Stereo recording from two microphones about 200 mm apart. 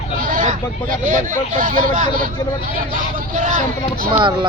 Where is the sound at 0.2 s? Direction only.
40° right (ahead or behind).